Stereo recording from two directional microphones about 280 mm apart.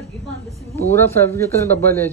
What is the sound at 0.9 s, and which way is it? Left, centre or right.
A man's voice, centre.